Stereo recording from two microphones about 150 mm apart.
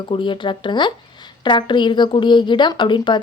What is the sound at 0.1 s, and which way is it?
A woman's voice, 35° left (ahead or behind).